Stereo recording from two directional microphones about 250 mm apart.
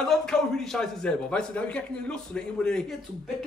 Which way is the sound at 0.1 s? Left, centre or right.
Centre.